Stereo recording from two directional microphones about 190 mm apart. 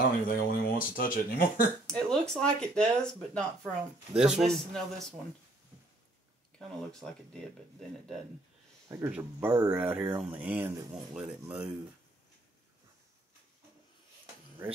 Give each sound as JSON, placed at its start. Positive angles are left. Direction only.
{"t": 0.3, "sound": "speech", "side_deg": 50}
{"t": 1.9, "sound": "speech", "side_deg": 5}
{"t": 8.8, "sound": "speech", "side_deg": -15}
{"t": 14.6, "sound": "speech", "side_deg": -10}